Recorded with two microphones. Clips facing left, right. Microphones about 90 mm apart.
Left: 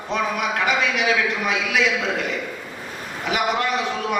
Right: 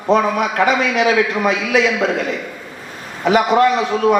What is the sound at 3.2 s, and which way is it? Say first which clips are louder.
Speech: right 9 dB; 40° right (ahead or behind).